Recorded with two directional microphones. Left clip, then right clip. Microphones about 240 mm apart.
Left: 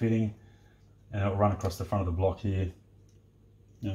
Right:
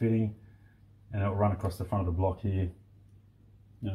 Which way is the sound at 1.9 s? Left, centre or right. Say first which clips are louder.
Left 2 dB; centre.